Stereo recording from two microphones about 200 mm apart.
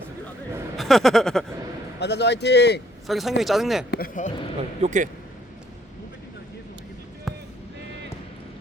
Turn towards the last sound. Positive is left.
turn(degrees=0)  # may be behind; listen again after turning